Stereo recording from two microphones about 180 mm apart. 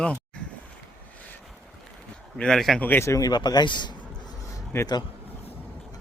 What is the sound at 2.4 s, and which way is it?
A man's voice, centre (ahead or behind).